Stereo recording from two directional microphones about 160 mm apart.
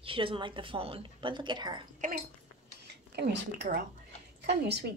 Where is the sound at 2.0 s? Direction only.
55° right (ahead or behind).